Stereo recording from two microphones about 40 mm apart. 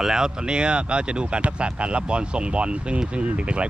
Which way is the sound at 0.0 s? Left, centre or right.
Centre.